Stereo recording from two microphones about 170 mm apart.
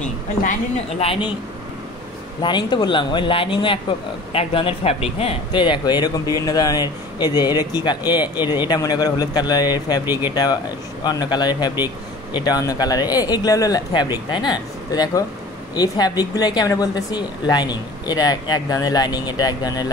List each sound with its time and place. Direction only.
0.4 s a woman's voice: 50° left (ahead or behind)
2.4 s speech: 25° left (ahead or behind)